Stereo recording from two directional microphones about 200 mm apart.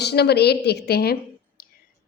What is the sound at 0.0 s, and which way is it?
A woman's voice, 55° left (ahead or behind).